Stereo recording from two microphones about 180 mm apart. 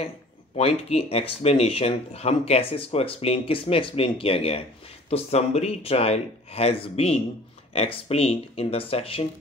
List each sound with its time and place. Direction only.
0.6 s speech: 35° left (ahead or behind)